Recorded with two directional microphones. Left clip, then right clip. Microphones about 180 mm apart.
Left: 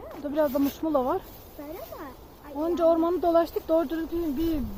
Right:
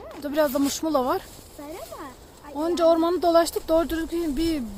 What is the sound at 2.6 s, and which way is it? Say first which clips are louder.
Speech: right 3 dB; 20° right (ahead or behind).